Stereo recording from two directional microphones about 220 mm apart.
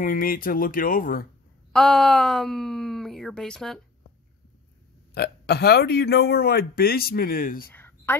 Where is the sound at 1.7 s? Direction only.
5° left (ahead or behind).